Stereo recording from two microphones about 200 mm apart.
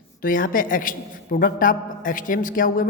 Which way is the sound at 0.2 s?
45° left (ahead or behind).